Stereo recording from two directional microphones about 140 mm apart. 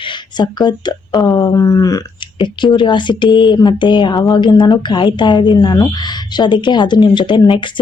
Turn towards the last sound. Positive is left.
turn(degrees=35)  # may be behind; listen again after turning